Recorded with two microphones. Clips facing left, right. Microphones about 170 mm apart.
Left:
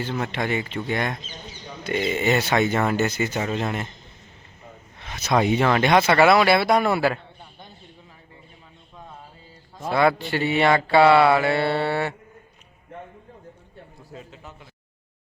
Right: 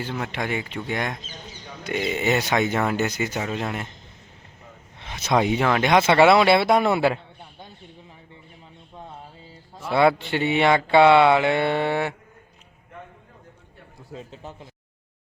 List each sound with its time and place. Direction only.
0.0 s speech: 10° right (ahead or behind)
5.0 s a sound: 25° right (ahead or behind)
5.3 s speech: 5° right (ahead or behind)
10.2 s speech: 20° right (ahead or behind)
14.1 s speech: 30° right (ahead or behind)